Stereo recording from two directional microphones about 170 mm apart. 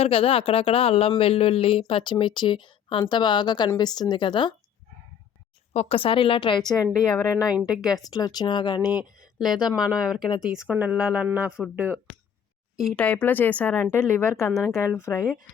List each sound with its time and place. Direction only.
0.0 s a woman's voice: 35° left (ahead or behind)
5.7 s a woman's voice: 35° left (ahead or behind)
6.8 s speech: 10° left (ahead or behind)
7.6 s speech: 5° right (ahead or behind)
7.9 s speech: 25° left (ahead or behind)
9.6 s speech: 5° right (ahead or behind); by 15.3 s 15° left (ahead or behind)